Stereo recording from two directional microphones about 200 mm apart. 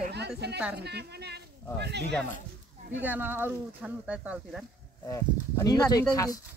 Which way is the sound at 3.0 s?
10° right (ahead or behind).